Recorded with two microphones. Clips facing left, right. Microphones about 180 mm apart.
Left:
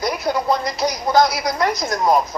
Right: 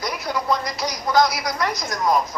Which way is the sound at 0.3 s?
30° left (ahead or behind).